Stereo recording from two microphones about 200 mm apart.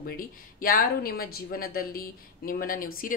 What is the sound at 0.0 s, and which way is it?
Speech, 45° left (ahead or behind).